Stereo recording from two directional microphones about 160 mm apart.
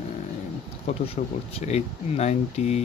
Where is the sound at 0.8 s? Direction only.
40° left (ahead or behind).